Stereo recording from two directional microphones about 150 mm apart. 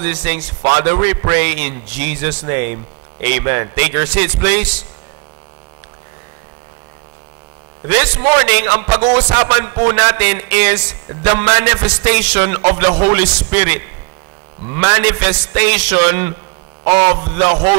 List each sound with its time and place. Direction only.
0.0 s a man's voice: 15° right (ahead or behind)
7.8 s a man's voice: 15° right (ahead or behind)
17.4 s a man's voice: 15° right (ahead or behind)